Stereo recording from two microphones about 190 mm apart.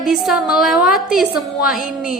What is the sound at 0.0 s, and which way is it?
A woman's voice, centre (ahead or behind).